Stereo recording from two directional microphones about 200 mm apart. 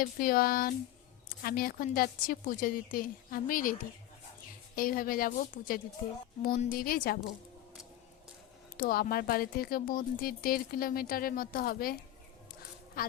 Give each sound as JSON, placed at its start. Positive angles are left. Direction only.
{"t": 0.0, "sound": "speech", "side_deg": 45}
{"t": 8.8, "sound": "speech", "side_deg": 45}
{"t": 13.0, "sound": "speech", "side_deg": 45}